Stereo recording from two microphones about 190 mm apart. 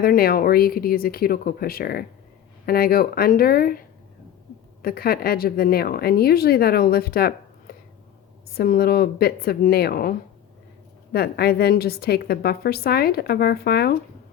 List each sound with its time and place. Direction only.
0.0 s a woman's voice: 50° left (ahead or behind)